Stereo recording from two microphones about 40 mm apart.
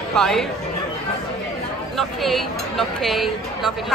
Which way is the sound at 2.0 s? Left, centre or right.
Centre.